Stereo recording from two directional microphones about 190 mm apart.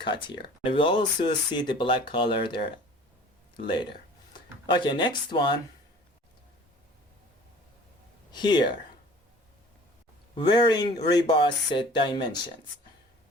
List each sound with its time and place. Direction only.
0.0 s speech: 25° left (ahead or behind)
4.6 s speech: 25° left (ahead or behind)
8.3 s speech: 25° left (ahead or behind)
10.3 s speech: 25° left (ahead or behind)